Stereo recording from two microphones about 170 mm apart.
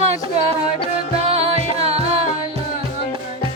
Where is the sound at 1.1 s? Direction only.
35° right (ahead or behind).